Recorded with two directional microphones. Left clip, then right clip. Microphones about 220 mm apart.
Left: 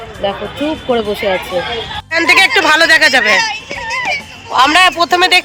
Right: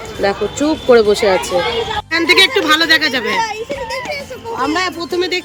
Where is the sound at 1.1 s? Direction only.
45° right (ahead or behind).